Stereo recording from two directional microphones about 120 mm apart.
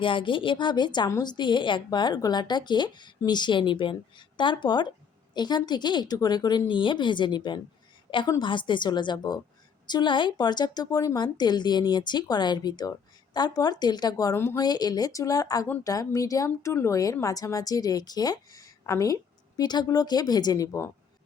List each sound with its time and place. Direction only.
0.0 s a woman's voice: 45° left (ahead or behind)